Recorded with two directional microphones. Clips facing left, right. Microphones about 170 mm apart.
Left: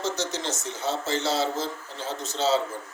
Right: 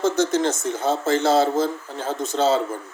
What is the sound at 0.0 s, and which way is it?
Speech, 50° right (ahead or behind).